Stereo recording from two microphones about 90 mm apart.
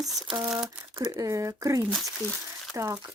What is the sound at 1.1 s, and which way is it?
Speech, 40° right (ahead or behind).